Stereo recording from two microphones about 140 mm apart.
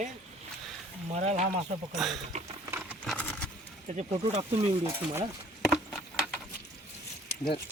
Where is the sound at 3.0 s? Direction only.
10° left (ahead or behind).